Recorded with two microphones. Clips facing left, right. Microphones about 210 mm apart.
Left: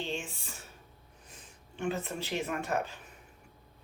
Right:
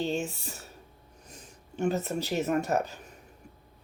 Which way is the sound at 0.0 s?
40° right (ahead or behind).